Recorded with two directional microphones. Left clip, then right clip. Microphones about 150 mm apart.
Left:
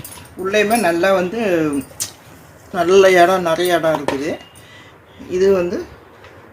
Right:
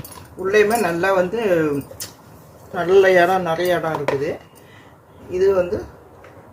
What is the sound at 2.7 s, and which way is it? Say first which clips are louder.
Speech: left 3 dB; 55° left (ahead or behind).